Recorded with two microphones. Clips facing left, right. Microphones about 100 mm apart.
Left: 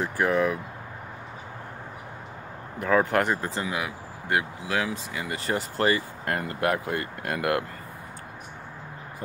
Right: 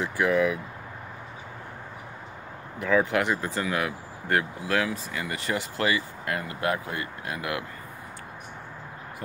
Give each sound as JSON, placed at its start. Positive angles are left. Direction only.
{"t": 0.0, "sound": "speech", "side_deg": 40}
{"t": 2.8, "sound": "speech", "side_deg": 45}
{"t": 3.7, "sound": "speech", "side_deg": 15}
{"t": 5.4, "sound": "speech", "side_deg": 35}